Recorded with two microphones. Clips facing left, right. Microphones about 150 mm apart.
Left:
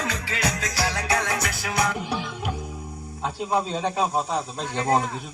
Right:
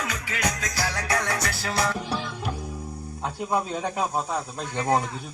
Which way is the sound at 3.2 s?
20° left (ahead or behind).